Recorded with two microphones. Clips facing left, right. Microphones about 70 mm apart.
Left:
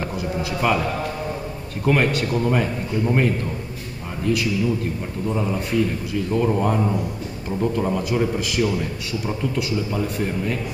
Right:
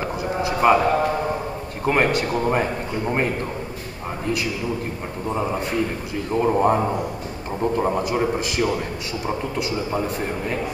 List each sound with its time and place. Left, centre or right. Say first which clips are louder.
0.4 s a sound: right 5 dB; right
1.9 s a man's voice: even; right
5.3 s a man's voice: even; right